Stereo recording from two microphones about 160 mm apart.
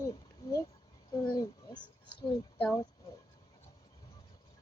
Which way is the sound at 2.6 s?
15° left (ahead or behind).